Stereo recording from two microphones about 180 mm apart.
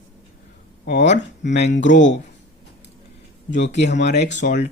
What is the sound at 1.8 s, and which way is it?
Speech, 45° left (ahead or behind).